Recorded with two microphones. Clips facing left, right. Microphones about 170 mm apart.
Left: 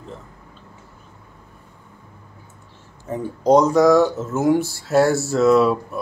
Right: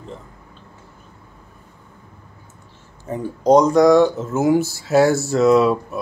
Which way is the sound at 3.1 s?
Centre (ahead or behind).